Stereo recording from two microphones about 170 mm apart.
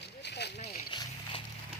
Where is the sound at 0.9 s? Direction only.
25° left (ahead or behind).